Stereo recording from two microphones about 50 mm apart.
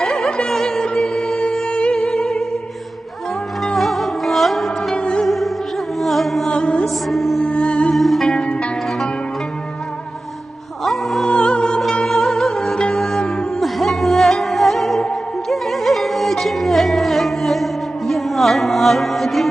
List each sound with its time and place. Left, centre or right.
0.0 s music: centre
3.8 s music: centre
4.9 s music: centre
5.2 s music: centre
6.5 s music: left
6.8 s music: centre
7.3 s music: left
7.9 s music: centre
8.3 s music: centre
10.8 s music: centre
11.3 s music: centre
12.0 s music: centre